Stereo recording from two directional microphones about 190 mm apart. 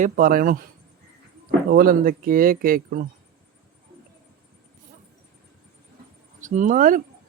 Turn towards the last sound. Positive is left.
turn(degrees=-45)  # may be behind; listen again after turning